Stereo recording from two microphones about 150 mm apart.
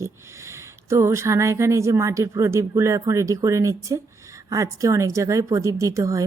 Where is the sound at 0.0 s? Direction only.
20° right (ahead or behind).